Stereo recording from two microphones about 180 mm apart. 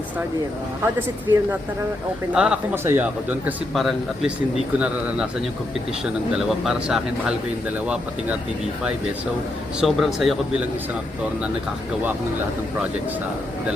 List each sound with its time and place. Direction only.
0.8 s speech: 15° right (ahead or behind)
6.3 s speech: 5° right (ahead or behind)
9.8 s speech: centre (ahead or behind)